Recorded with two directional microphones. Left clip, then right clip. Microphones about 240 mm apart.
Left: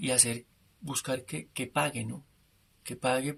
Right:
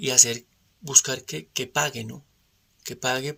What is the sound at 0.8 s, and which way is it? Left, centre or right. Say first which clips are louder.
Speech: right 11 dB; right.